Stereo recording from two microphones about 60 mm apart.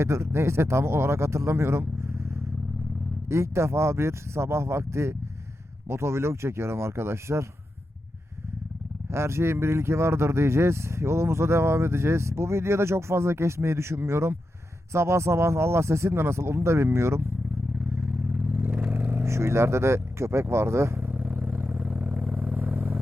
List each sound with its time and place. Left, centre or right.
0.0 s speech: right
3.2 s speech: right
9.0 s speech: right
17.9 s vehicle: right
19.2 s speech: right
21.1 s vehicle: right